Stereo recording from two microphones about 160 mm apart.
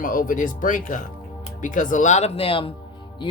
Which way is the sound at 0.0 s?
60° left (ahead or behind).